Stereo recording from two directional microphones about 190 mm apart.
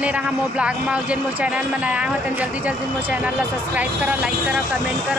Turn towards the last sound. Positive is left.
turn(degrees=-5)  # may be behind; listen again after turning